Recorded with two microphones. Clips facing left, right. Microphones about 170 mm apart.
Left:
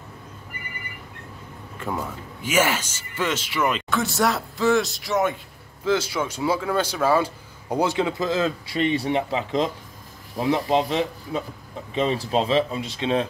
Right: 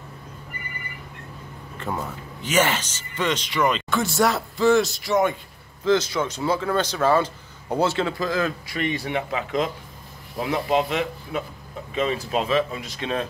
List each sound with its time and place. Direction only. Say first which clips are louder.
1.9 s speech: even; 10° right (ahead or behind)
2.4 s speech: even; 10° left (ahead or behind)